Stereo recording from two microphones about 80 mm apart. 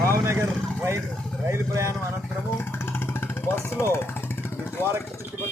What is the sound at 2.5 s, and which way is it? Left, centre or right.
Music, left.